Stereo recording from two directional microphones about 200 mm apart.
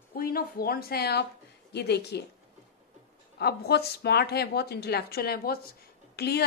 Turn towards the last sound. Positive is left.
turn(degrees=55)  # may be behind; listen again after turning